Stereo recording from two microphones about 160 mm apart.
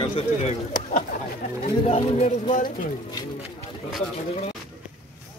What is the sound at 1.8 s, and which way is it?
Speech, 40° left (ahead or behind).